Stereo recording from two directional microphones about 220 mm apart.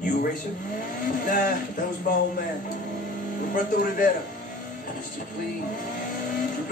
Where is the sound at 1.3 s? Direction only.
40° left (ahead or behind).